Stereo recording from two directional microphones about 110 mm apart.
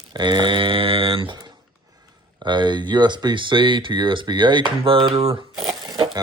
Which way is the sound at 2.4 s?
45° right (ahead or behind).